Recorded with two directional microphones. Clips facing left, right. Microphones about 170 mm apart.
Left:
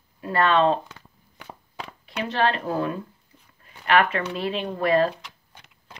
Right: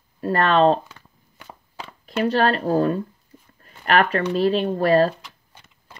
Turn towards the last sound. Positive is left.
turn(degrees=-35)  # may be behind; listen again after turning